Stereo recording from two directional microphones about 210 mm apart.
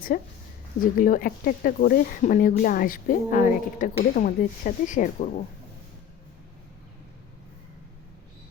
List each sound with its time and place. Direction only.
0.1 s a woman's voice: 40° left (ahead or behind)